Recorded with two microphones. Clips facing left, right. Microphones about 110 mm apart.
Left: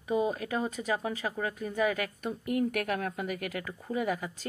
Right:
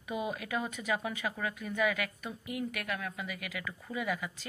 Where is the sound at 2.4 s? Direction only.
55° left (ahead or behind).